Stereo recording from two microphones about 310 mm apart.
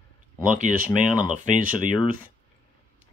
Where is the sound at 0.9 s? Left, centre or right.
Centre.